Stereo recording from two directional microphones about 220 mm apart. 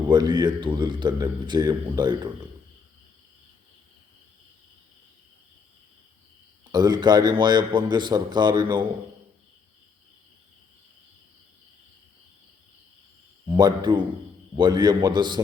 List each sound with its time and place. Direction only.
0.1 s a man's voice: 20° right (ahead or behind)
6.7 s a man's voice: 15° right (ahead or behind)
13.6 s a man's voice: 20° right (ahead or behind)